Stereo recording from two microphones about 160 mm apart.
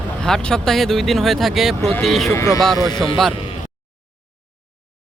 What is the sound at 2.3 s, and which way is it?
Speech, 15° left (ahead or behind).